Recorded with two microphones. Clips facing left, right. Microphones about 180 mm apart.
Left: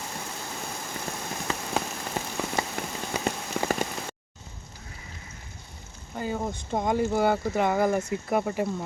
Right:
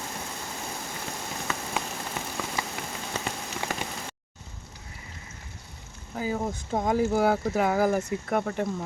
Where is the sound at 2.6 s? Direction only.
45° left (ahead or behind).